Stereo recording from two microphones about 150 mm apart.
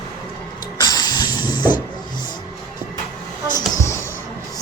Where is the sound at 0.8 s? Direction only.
30° left (ahead or behind).